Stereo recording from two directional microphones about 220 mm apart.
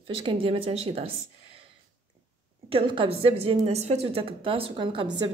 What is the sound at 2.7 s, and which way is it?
Speech, 25° right (ahead or behind).